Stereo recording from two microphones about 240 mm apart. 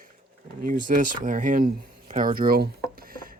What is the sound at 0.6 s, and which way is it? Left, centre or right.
Speech, right.